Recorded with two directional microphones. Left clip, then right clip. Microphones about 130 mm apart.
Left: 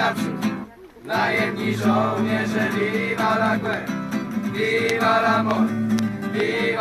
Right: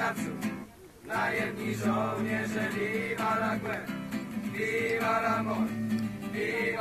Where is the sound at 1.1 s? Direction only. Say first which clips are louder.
Left 9 dB; 5° right (ahead or behind).